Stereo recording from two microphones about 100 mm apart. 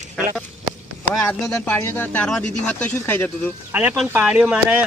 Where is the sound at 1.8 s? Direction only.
20° left (ahead or behind).